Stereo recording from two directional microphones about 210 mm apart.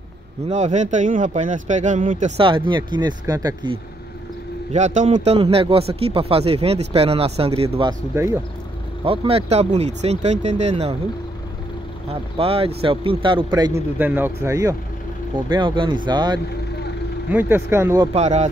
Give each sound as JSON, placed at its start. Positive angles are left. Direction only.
{"t": 0.5, "sound": "speech", "side_deg": -35}
{"t": 4.7, "sound": "a man's voice", "side_deg": -35}
{"t": 8.1, "sound": "speech", "side_deg": -15}
{"t": 9.0, "sound": "a man's voice", "side_deg": -25}
{"t": 12.1, "sound": "a man's voice", "side_deg": -30}
{"t": 13.9, "sound": "a man's voice", "side_deg": -10}
{"t": 17.3, "sound": "speech", "side_deg": -10}
{"t": 18.1, "sound": "speech", "side_deg": -30}